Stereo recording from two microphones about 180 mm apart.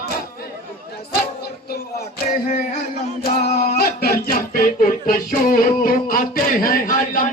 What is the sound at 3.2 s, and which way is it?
Music, 65° left (ahead or behind).